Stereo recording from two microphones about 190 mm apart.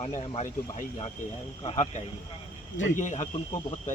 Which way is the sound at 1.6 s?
30° left (ahead or behind).